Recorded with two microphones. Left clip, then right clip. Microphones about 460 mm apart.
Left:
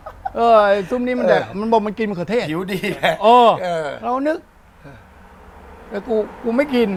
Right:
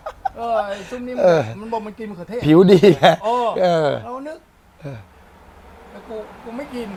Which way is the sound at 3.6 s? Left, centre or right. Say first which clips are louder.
Right 6 dB; right.